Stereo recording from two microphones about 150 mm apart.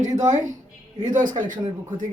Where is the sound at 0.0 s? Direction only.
55° right (ahead or behind).